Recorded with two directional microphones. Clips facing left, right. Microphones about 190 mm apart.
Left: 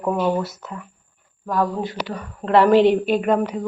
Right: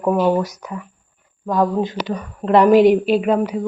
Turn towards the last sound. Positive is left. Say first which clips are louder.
# right 2 dB
turn(degrees=-5)  # may be behind; listen again after turning